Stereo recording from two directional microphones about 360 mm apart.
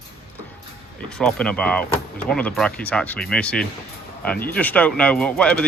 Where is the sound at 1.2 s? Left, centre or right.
Centre.